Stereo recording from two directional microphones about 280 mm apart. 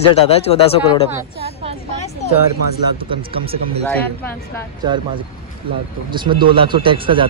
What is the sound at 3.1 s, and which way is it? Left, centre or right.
Speech, centre.